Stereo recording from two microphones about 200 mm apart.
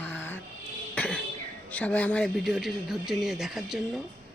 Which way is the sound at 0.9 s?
5° left (ahead or behind).